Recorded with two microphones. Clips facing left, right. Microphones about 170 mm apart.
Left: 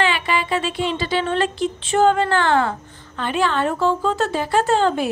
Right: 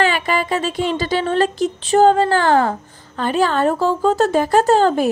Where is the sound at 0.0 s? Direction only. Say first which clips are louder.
Right 3 dB; 45° right (ahead or behind).